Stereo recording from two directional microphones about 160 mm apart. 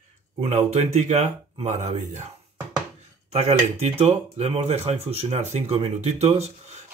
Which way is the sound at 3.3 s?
40° right (ahead or behind).